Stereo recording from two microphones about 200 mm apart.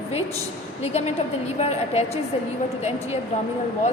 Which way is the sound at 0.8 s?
30° left (ahead or behind).